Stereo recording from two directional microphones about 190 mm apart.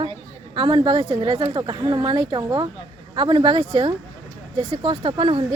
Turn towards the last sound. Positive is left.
turn(degrees=-30)  # may be behind; listen again after turning